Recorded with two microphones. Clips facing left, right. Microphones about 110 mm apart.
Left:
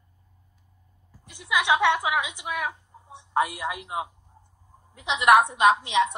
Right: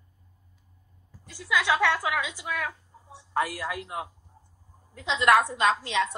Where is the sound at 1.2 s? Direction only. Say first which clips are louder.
Left 1 dB; 20° left (ahead or behind).